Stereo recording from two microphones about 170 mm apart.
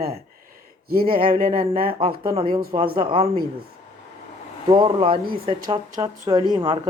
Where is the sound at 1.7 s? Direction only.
60° right (ahead or behind).